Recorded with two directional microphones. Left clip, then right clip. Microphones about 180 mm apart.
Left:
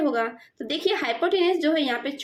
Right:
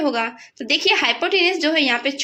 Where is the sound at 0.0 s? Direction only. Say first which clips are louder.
Right 3 dB; 15° right (ahead or behind).